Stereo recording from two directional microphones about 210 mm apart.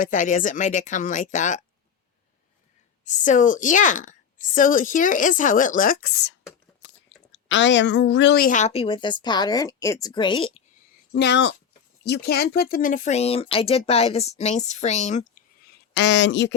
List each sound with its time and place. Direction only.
0.0 s a woman's voice: 35° left (ahead or behind)
3.0 s a woman's voice: 35° left (ahead or behind)
7.3 s a woman's voice: 60° left (ahead or behind); by 10.5 s 20° left (ahead or behind)
11.1 s a woman's voice: 55° left (ahead or behind); by 15.2 s 35° left (ahead or behind)
15.6 s speech: 60° left (ahead or behind)